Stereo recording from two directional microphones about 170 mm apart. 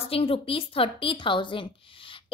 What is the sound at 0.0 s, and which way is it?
A woman's voice, 35° left (ahead or behind).